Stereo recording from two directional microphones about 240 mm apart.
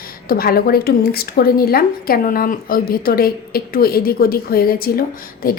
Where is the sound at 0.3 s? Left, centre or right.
Left.